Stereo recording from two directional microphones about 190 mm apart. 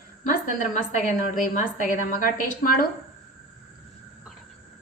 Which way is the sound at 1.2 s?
45° left (ahead or behind).